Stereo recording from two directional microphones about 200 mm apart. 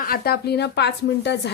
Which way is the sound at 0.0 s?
50° left (ahead or behind).